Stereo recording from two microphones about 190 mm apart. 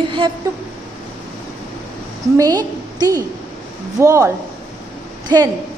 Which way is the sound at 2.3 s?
20° right (ahead or behind).